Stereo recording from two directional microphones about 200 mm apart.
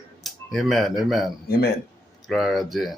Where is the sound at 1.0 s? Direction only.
Centre (ahead or behind).